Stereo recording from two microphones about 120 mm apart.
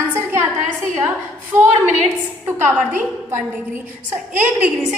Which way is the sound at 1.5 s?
25° right (ahead or behind).